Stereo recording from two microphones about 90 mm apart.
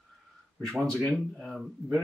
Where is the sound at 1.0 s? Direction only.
5° left (ahead or behind).